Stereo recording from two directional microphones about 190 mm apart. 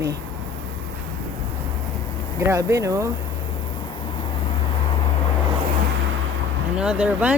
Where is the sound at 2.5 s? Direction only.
15° right (ahead or behind).